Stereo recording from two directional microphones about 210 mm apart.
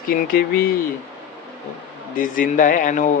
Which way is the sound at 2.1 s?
40° left (ahead or behind).